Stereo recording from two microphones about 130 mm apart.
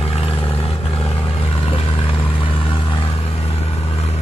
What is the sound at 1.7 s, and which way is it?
Vehicle, 45° left (ahead or behind).